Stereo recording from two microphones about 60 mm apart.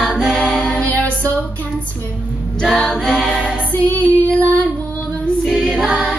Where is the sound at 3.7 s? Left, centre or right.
Left.